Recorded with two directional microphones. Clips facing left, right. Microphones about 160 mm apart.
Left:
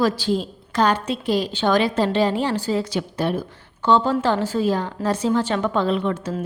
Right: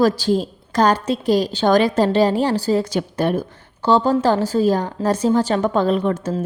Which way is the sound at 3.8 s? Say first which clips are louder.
Right 2 dB; 35° right (ahead or behind).